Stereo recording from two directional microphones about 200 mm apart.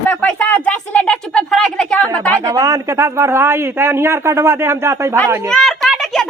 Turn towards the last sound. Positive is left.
turn(degrees=0)  # may be behind; listen again after turning